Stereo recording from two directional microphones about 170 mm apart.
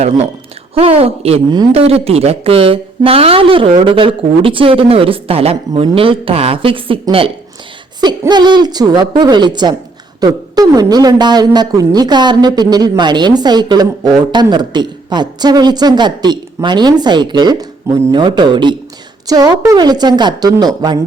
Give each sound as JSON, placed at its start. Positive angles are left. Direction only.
{"t": 0.7, "sound": "speech", "side_deg": -35}
{"t": 8.2, "sound": "speech", "side_deg": -25}